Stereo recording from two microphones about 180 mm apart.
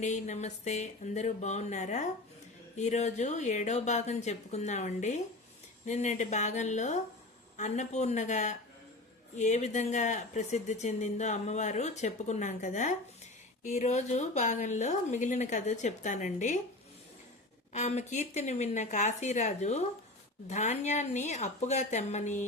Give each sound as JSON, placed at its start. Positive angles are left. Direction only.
{"t": 0.0, "sound": "speech", "side_deg": 40}
{"t": 17.7, "sound": "speech", "side_deg": 40}